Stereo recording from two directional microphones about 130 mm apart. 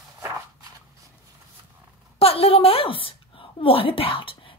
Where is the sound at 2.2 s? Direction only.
50° left (ahead or behind).